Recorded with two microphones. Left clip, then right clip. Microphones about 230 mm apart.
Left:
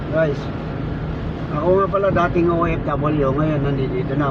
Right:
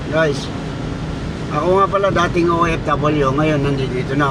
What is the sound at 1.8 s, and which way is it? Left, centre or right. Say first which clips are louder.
Speech: right 2 dB; right.